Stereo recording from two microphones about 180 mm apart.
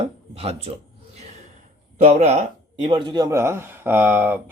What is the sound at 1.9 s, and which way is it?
Speech, 40° right (ahead or behind).